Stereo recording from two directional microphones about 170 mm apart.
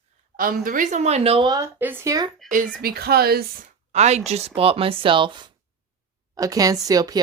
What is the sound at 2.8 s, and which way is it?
Speech, 65° right (ahead or behind).